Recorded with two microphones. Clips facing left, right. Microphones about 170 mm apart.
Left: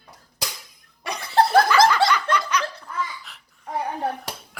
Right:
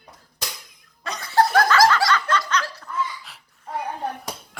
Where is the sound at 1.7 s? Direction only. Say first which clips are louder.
Even; 15° left (ahead or behind).